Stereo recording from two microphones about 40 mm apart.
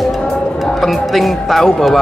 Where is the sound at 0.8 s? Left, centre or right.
Centre.